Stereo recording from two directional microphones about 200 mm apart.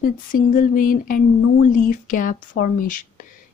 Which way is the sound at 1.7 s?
40° left (ahead or behind).